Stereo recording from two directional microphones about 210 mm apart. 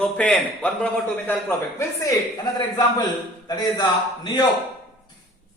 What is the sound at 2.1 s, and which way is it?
A man's voice, 20° left (ahead or behind).